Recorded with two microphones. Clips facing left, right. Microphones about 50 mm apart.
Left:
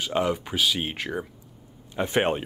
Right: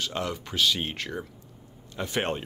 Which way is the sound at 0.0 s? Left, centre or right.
Centre.